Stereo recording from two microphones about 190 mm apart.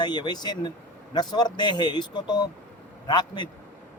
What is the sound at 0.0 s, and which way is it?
A man's voice, 20° left (ahead or behind).